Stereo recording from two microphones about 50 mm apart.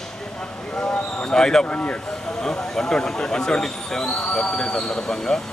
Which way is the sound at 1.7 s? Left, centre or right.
Left.